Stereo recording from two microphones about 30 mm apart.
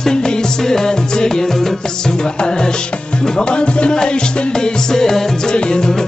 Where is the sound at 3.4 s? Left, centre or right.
Left.